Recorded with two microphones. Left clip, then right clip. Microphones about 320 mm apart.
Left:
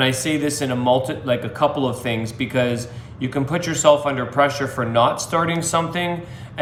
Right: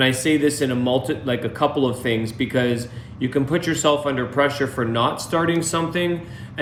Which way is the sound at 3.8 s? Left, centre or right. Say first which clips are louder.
Left 7 dB; left.